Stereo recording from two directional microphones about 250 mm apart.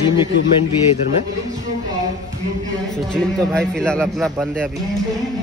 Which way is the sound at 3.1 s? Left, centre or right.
Centre.